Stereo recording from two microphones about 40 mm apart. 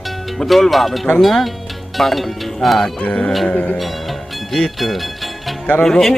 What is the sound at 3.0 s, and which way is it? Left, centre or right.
Speech, left.